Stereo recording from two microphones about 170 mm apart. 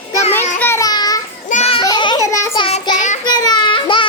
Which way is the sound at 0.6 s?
15° left (ahead or behind).